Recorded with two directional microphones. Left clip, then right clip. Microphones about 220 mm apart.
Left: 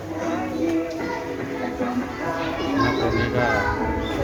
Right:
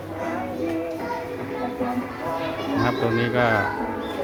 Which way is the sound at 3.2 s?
20° right (ahead or behind).